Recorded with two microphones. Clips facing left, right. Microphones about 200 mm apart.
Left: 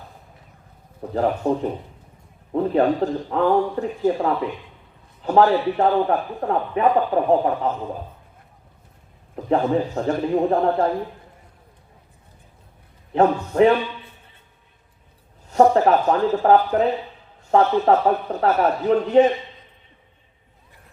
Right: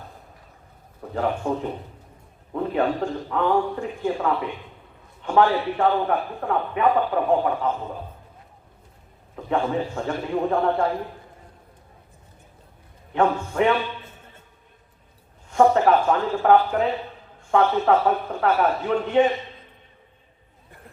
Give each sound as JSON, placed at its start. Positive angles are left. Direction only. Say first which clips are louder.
{"t": 1.1, "sound": "a man's voice", "louder": "left 4 dB", "side_deg": 35}
{"t": 9.3, "sound": "a man's voice", "louder": "left 4 dB", "side_deg": 35}
{"t": 13.1, "sound": "a man's voice", "louder": "left 4 dB", "side_deg": 40}
{"t": 15.4, "sound": "a man's voice", "louder": "left 2 dB", "side_deg": 40}